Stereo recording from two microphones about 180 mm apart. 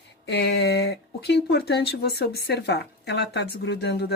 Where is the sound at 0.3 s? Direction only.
70° left (ahead or behind).